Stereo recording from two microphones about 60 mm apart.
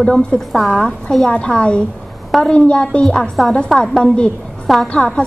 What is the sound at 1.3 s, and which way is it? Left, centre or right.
A woman's voice, centre.